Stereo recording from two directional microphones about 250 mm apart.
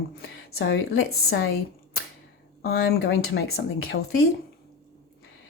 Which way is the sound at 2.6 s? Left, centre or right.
Left.